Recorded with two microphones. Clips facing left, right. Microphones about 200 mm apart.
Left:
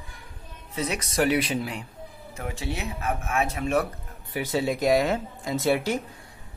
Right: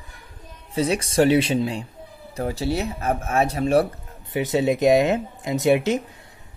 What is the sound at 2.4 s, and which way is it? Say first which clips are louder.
Speech: right 8 dB; 35° right (ahead or behind).